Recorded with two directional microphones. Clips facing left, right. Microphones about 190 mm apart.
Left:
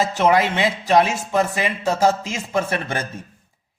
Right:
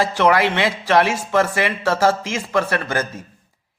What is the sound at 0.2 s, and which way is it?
Speech, 20° left (ahead or behind).